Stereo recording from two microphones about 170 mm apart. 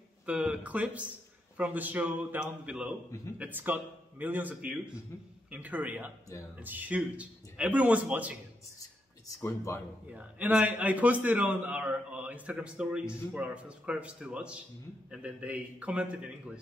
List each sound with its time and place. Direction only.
0.3 s a man's voice: 5° right (ahead or behind)
10.1 s a man's voice: 10° right (ahead or behind)